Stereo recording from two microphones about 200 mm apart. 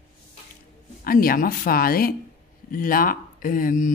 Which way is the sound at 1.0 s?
45° left (ahead or behind).